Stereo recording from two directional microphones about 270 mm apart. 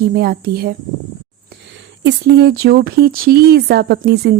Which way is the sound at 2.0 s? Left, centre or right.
Right.